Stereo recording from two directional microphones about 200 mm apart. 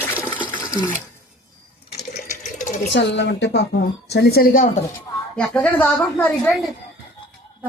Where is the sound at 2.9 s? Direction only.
60° left (ahead or behind); by 4.7 s 45° left (ahead or behind).